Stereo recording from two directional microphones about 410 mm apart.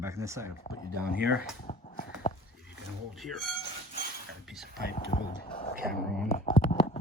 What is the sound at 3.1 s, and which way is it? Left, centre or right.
Speech, centre.